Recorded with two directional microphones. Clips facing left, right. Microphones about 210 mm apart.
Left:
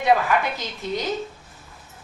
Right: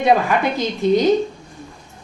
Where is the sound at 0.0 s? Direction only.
25° right (ahead or behind).